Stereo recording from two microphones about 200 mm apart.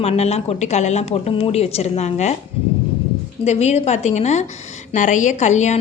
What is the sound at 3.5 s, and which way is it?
A woman's voice, 35° left (ahead or behind).